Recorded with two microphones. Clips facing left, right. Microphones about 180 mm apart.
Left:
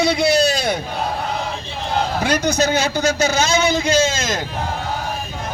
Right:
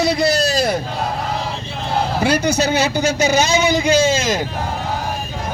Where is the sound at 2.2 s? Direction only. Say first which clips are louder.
Right 2 dB; 10° right (ahead or behind).